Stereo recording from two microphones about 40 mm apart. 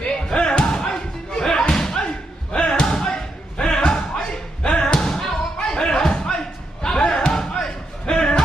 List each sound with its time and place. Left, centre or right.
0.1 s slam: left
2.9 s thump: centre
4.9 s thump: centre
5.5 s a sound: left
6.8 s slam: left